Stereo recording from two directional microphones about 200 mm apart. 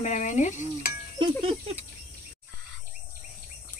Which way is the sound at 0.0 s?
35° left (ahead or behind).